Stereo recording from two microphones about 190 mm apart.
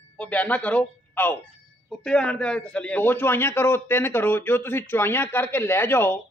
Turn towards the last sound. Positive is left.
turn(degrees=10)  # may be behind; listen again after turning